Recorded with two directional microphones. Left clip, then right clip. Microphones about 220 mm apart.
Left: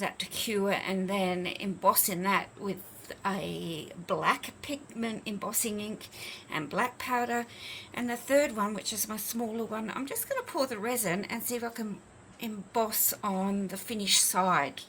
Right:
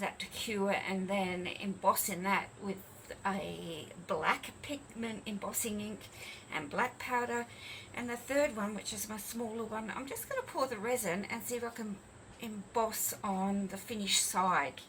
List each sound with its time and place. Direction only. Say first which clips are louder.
0.0 s speech: left 5 dB; 55° left (ahead or behind)